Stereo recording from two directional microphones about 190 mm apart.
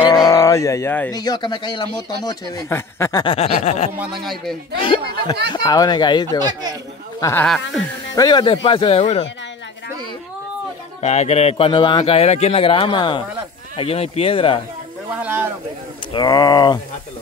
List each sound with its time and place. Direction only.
0.0 s a sound: 20° left (ahead or behind)
1.1 s speech: 20° left (ahead or behind)
3.3 s speech: 35° left (ahead or behind)
4.0 s a man's voice: centre (ahead or behind)
4.7 s speech: 25° left (ahead or behind)
6.4 s speech: 20° right (ahead or behind)
7.2 s speech: 15° left (ahead or behind); by 9.2 s 35° left (ahead or behind)
11.0 s speech: 35° left (ahead or behind)
15.2 s a sound: 10° right (ahead or behind)
16.1 s speech: 20° left (ahead or behind)